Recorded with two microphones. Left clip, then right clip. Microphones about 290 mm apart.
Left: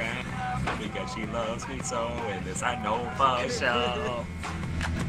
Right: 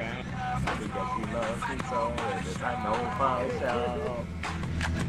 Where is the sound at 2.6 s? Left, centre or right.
Left.